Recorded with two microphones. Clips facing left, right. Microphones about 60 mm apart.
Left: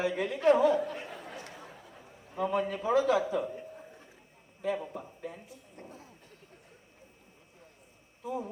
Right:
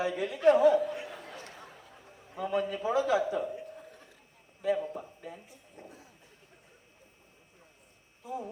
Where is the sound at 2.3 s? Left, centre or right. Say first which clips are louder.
Left 1 dB; left.